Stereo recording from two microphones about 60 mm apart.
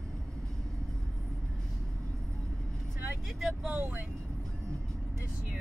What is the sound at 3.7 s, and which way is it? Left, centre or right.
Speech, right.